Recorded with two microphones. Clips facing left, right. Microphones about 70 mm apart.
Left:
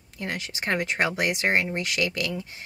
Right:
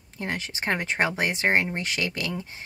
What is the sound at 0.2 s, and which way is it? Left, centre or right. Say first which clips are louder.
Speech: right 1 dB; right.